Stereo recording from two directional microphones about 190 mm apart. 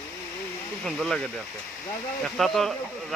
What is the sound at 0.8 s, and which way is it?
Speech, centre (ahead or behind).